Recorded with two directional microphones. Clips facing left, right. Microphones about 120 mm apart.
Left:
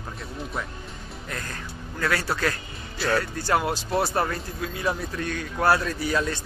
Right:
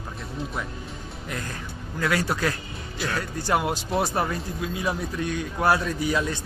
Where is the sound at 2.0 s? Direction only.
15° right (ahead or behind).